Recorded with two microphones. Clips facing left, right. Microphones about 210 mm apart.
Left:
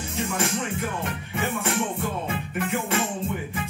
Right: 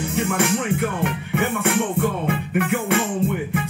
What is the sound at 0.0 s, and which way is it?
Music, 60° right (ahead or behind).